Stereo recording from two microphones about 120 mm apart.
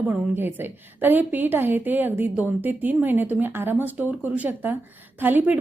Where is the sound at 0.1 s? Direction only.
15° right (ahead or behind).